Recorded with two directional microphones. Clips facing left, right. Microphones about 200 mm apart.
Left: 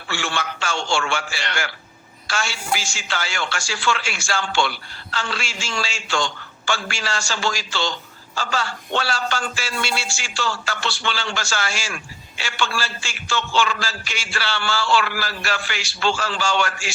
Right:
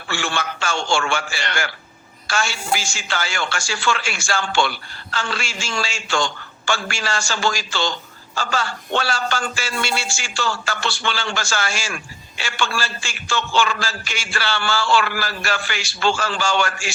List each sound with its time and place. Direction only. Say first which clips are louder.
0.1 s a woman's voice: right 2 dB; 50° right (ahead or behind)